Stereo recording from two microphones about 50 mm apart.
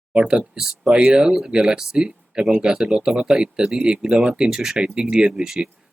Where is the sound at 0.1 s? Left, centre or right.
Right.